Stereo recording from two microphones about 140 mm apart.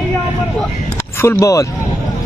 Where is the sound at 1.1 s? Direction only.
20° left (ahead or behind).